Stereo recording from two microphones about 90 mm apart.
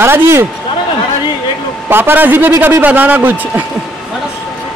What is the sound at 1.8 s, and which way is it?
A man's voice, 25° right (ahead or behind).